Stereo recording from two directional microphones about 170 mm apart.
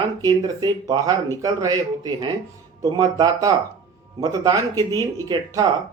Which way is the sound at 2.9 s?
20° right (ahead or behind).